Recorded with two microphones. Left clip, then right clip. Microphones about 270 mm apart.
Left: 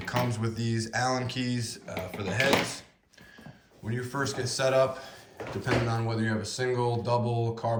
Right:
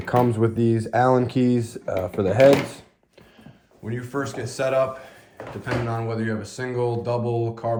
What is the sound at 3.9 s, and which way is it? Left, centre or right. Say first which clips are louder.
Speech: right 3 dB; centre.